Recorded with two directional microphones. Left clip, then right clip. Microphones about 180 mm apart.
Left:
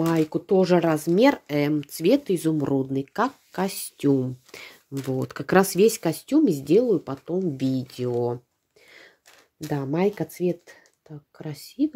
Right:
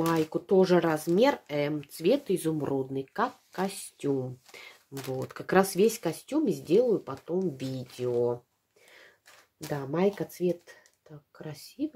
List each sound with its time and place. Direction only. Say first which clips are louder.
0.0 s speech: left 4 dB; 30° left (ahead or behind)
9.7 s speech: left 4 dB; 35° left (ahead or behind)